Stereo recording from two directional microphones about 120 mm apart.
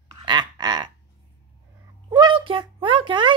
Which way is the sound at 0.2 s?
40° right (ahead or behind).